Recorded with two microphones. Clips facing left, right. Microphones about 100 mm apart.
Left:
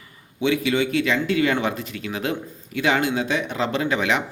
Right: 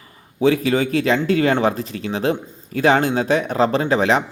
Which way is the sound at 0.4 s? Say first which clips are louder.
Right 4 dB; 40° right (ahead or behind).